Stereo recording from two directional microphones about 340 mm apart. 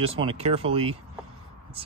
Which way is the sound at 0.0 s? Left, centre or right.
Centre.